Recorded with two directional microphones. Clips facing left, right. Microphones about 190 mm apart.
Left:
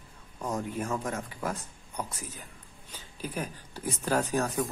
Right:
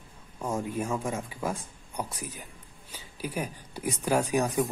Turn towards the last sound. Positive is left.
turn(degrees=-10)  # may be behind; listen again after turning